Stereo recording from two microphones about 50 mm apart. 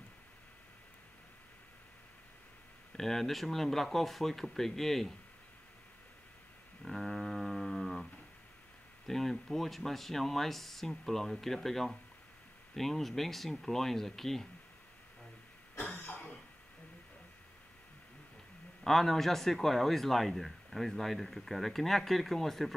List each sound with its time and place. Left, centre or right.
3.0 s speech: centre
6.8 s a sound: centre
9.0 s speech: centre
15.8 s cough: left
18.9 s speech: centre